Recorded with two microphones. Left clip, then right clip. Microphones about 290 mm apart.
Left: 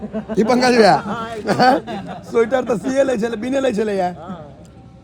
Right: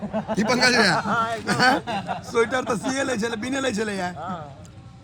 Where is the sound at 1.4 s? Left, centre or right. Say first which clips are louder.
Left 7 dB; left.